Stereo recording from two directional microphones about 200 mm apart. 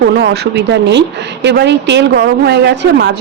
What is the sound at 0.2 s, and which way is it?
A woman's voice, 60° right (ahead or behind).